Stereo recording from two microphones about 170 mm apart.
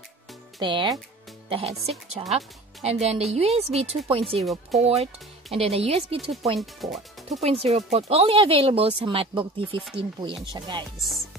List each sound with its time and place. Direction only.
0.6 s chopping: 25° right (ahead or behind)
1.5 s speech: 35° right (ahead or behind)
6.6 s speech: centre (ahead or behind)
7.2 s speech: 40° right (ahead or behind)
10.5 s chopping: 25° right (ahead or behind)
11.0 s speech: centre (ahead or behind)